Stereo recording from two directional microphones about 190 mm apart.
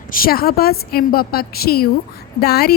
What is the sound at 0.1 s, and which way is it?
A woman's voice, 50° left (ahead or behind).